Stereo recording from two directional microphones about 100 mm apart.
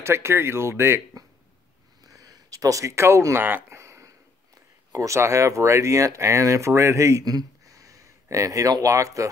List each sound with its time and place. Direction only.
0.0 s speech: 25° right (ahead or behind)
2.0 s a sound: 35° right (ahead or behind)
4.9 s speech: 30° right (ahead or behind)